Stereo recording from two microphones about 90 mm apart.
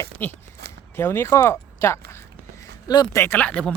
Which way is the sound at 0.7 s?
25° left (ahead or behind).